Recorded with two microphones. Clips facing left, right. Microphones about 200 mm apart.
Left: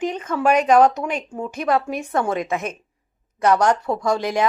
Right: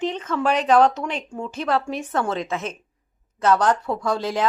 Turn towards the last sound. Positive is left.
turn(degrees=15)  # may be behind; listen again after turning